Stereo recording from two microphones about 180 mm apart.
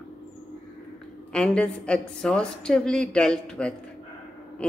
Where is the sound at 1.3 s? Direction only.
5° left (ahead or behind).